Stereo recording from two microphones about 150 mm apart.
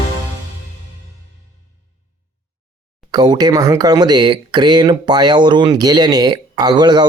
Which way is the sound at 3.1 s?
30° right (ahead or behind).